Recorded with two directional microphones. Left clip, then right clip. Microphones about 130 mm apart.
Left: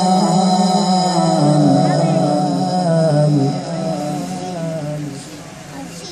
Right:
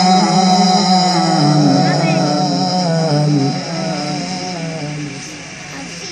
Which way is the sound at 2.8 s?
50° left (ahead or behind).